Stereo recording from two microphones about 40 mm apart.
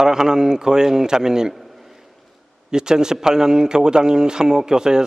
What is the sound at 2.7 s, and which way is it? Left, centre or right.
A man's voice, centre.